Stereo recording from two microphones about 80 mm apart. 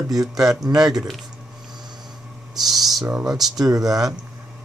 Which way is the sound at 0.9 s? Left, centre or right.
Centre.